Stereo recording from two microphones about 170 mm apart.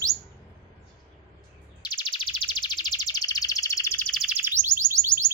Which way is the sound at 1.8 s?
25° left (ahead or behind).